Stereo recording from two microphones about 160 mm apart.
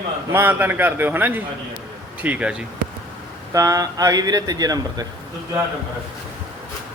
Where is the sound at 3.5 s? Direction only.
20° right (ahead or behind).